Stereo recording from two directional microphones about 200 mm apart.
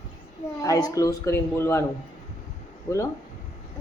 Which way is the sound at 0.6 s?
15° left (ahead or behind).